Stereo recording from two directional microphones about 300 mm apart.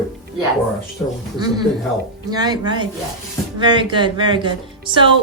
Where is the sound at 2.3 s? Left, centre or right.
Centre.